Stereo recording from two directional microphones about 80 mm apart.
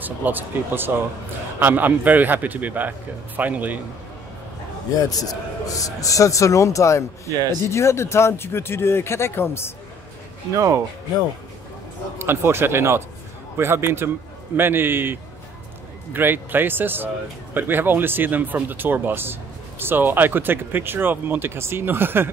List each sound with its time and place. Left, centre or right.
0.0 s speech: right
4.9 s a man's voice: left
10.5 s speech: right
12.2 s speech: right